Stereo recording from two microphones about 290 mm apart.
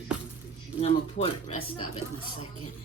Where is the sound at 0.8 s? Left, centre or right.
Left.